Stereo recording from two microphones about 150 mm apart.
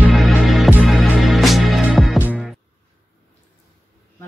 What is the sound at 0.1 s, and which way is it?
Music, centre (ahead or behind).